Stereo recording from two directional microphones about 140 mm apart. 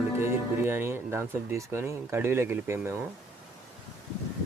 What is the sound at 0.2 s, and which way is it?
Speech, 15° right (ahead or behind).